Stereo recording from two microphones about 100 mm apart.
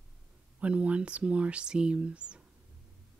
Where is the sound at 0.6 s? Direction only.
15° right (ahead or behind).